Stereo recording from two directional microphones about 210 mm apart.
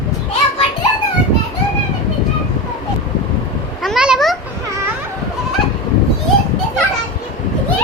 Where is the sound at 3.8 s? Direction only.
Centre (ahead or behind).